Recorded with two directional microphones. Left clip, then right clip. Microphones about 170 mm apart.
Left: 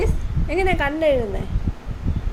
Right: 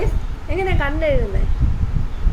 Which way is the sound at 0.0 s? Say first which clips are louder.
Left 1 dB; 25° left (ahead or behind).